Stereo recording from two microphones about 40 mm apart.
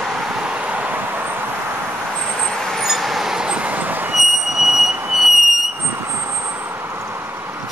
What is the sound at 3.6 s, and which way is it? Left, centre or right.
Vehicle, right.